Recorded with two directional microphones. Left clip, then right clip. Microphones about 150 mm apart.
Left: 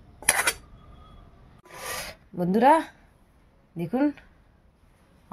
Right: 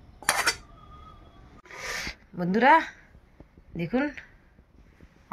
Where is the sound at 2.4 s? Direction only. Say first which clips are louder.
Even; 70° left (ahead or behind).